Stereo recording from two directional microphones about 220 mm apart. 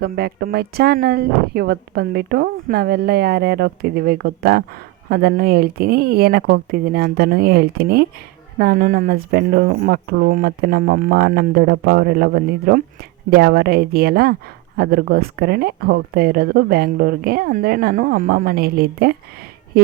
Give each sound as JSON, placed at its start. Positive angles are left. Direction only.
{"t": 0.0, "sound": "speech", "side_deg": -45}